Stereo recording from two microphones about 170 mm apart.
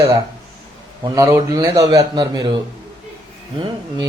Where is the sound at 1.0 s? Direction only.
20° right (ahead or behind).